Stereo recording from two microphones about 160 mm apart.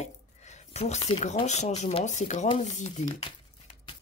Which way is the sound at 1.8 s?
45° left (ahead or behind).